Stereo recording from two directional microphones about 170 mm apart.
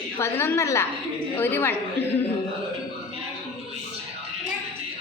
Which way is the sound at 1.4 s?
10° left (ahead or behind).